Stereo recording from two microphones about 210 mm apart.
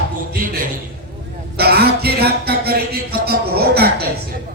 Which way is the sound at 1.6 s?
50° right (ahead or behind).